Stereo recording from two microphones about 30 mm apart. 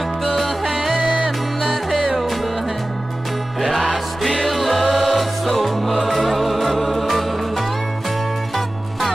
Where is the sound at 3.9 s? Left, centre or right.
Centre.